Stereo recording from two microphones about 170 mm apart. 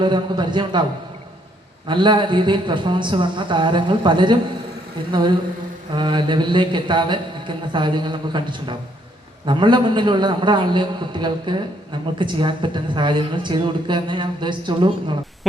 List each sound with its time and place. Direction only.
0.0 s a woman's voice: 25° right (ahead or behind)
1.9 s a woman's voice: 30° right (ahead or behind)
5.9 s a woman's voice: 25° right (ahead or behind)